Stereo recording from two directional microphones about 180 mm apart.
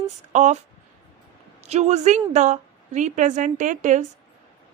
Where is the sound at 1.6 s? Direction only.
40° right (ahead or behind).